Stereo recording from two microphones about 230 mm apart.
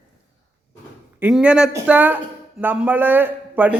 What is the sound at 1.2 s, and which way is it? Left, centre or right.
A man's voice, centre.